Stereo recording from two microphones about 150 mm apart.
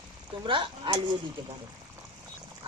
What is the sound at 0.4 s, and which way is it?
Speech, 35° right (ahead or behind).